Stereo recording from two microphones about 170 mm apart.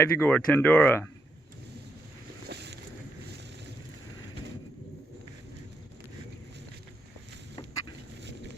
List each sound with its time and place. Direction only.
0.0 s speech: 10° left (ahead or behind)
2.5 s boat: 80° right